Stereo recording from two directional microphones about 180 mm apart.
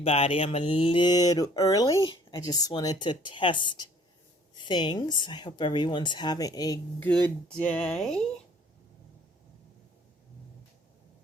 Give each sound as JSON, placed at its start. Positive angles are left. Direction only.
{"t": 0.0, "sound": "speech", "side_deg": 30}
{"t": 7.0, "sound": "speech", "side_deg": 5}